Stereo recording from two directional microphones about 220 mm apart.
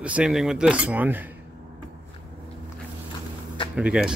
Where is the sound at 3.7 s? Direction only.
5° right (ahead or behind).